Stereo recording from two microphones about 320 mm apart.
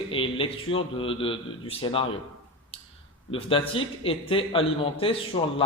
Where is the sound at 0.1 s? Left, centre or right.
Centre.